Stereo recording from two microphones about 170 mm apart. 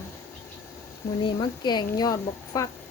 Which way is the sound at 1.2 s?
25° left (ahead or behind).